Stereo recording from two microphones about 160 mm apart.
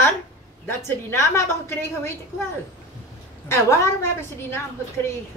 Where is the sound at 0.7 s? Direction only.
15° left (ahead or behind).